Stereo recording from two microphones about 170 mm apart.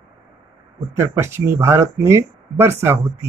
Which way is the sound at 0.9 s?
15° right (ahead or behind).